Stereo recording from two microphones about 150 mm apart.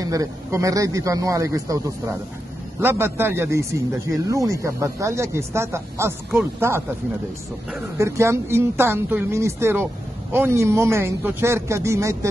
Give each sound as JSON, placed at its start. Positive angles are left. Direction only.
{"t": 0.0, "sound": "speech", "side_deg": -20}
{"t": 2.8, "sound": "speech", "side_deg": -15}
{"t": 8.0, "sound": "speech", "side_deg": -20}